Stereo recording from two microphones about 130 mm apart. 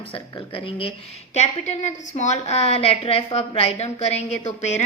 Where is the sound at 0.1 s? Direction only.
40° left (ahead or behind).